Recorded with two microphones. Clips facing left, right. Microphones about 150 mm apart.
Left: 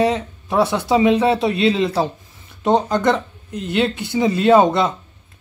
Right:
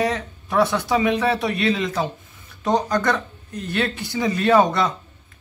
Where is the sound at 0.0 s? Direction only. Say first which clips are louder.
Left 5 dB; 25° left (ahead or behind).